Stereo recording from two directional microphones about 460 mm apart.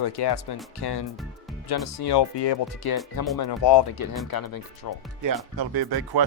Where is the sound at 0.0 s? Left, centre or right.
Left.